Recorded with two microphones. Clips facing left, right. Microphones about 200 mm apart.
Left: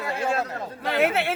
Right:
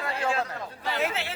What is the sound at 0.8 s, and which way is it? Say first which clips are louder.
Speech: left 7 dB; 60° left (ahead or behind).